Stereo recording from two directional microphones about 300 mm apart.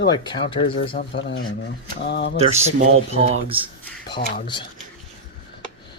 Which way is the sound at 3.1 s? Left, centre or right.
Centre.